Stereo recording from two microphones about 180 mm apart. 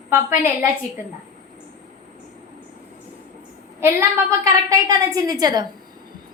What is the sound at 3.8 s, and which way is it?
A woman's voice, 15° right (ahead or behind).